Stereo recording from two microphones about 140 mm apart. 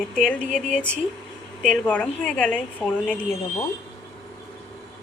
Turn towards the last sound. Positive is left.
turn(degrees=15)  # may be behind; listen again after turning